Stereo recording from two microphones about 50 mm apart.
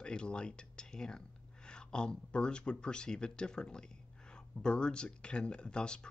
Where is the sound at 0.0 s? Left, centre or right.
Centre.